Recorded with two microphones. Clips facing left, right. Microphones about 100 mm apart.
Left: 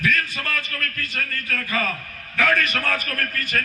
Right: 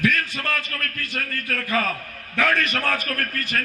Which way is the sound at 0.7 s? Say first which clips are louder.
Left 1 dB; 40° right (ahead or behind).